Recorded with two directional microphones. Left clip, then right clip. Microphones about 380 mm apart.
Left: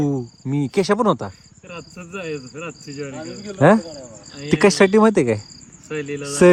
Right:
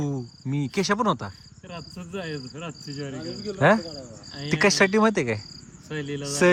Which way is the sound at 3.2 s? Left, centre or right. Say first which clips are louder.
Left 5 dB; left.